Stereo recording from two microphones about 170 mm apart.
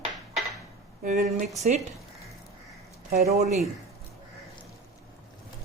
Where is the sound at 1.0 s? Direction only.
45° right (ahead or behind).